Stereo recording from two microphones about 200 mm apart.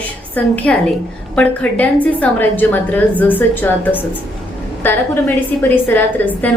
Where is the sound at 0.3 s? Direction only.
5° left (ahead or behind).